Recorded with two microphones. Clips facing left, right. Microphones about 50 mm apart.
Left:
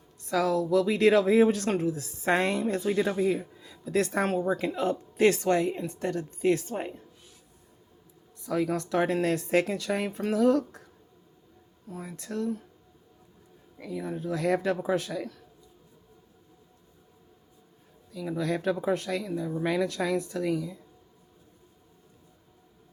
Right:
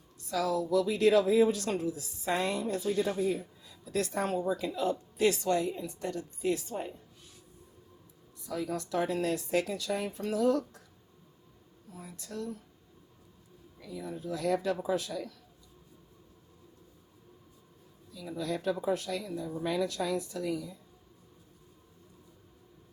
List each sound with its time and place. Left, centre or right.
0.3 s speech: left
8.4 s speech: left
11.9 s speech: left
13.7 s speech: left
18.1 s speech: left